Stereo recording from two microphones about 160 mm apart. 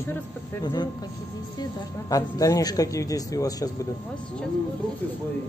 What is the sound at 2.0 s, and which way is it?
A man's voice, 20° left (ahead or behind).